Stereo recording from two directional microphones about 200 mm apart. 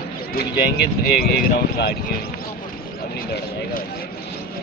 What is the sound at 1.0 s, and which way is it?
Speech, 50° left (ahead or behind).